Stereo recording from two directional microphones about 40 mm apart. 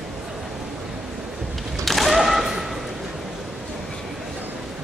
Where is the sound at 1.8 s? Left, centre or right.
Centre.